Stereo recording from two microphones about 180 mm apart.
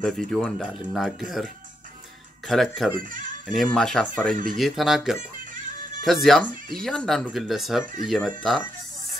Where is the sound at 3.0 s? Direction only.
50° right (ahead or behind).